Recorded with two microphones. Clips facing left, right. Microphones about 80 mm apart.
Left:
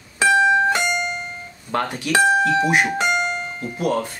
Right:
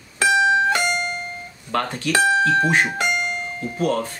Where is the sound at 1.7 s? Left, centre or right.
Centre.